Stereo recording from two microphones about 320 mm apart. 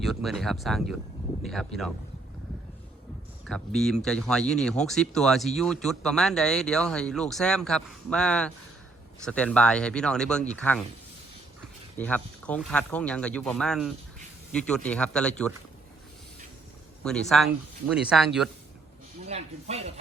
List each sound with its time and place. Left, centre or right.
0.0 s speech: centre
3.4 s speech: centre
11.9 s speech: centre
17.0 s speech: centre
19.3 s speech: centre